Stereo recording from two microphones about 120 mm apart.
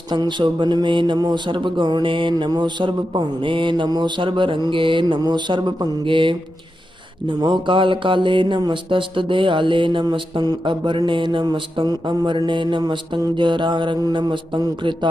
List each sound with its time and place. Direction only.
0.1 s mantra: 40° right (ahead or behind)